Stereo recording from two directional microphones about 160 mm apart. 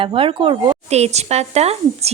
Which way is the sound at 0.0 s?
35° right (ahead or behind).